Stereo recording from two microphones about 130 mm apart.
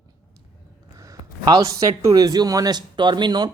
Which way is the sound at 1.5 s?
25° right (ahead or behind).